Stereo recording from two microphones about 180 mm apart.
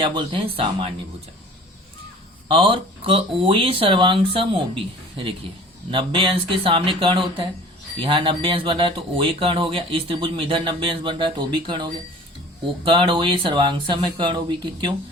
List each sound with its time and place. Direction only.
0.0 s speech: 25° right (ahead or behind)
2.5 s speech: 25° right (ahead or behind)